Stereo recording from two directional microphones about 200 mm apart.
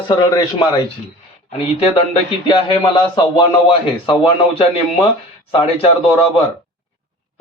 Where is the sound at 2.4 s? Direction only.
25° left (ahead or behind).